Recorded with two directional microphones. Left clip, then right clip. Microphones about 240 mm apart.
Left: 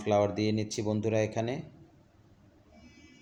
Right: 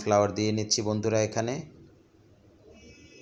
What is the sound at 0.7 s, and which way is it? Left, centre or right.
Speech, centre.